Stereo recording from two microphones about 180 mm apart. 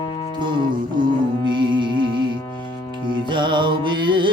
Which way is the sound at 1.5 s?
25° right (ahead or behind).